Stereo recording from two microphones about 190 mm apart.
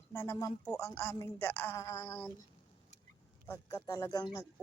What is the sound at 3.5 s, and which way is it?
A woman's voice, 15° left (ahead or behind).